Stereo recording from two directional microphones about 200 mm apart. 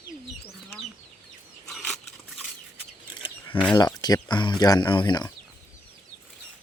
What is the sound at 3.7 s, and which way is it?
Speech, 20° left (ahead or behind).